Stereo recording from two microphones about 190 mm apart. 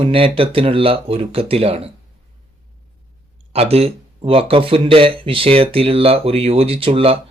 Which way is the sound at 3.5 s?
30° right (ahead or behind).